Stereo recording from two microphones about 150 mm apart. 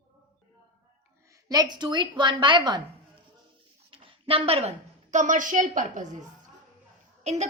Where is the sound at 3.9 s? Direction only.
35° right (ahead or behind).